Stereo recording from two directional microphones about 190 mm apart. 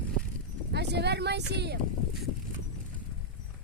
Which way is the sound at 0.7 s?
60° right (ahead or behind).